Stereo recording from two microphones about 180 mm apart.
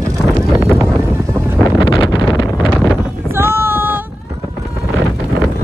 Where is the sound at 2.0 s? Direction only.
25° left (ahead or behind).